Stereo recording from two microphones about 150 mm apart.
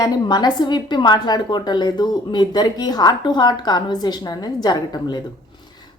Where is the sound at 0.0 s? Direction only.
30° left (ahead or behind).